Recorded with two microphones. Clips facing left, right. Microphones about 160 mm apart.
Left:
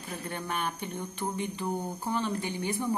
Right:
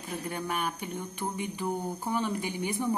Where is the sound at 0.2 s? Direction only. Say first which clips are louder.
Right 1 dB; 10° right (ahead or behind).